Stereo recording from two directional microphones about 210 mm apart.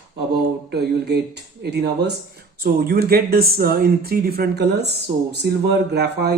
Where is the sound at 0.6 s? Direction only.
50° right (ahead or behind).